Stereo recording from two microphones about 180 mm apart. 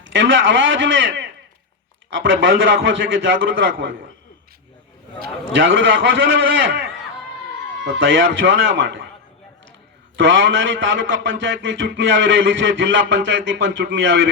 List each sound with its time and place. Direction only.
0.0 s a man's voice: 90° right
5.2 s a man's voice: 90° right
7.9 s a man's voice: 90° right
10.2 s a man's voice: 90° right